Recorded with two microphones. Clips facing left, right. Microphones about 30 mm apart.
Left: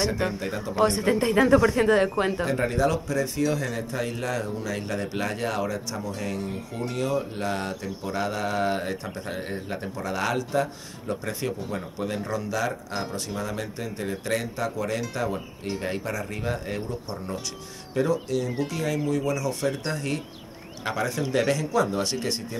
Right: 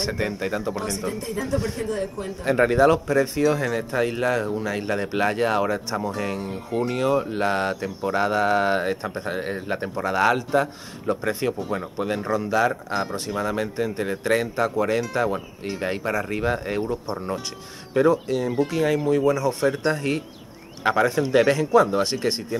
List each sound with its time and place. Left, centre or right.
0.4 s speech: centre
0.7 s a man's voice: left
2.4 s speech: right
19.6 s speech: centre